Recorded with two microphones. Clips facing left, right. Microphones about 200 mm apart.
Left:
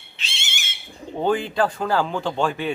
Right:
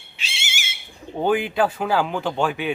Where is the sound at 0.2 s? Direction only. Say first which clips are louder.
Right 2 dB; 10° right (ahead or behind).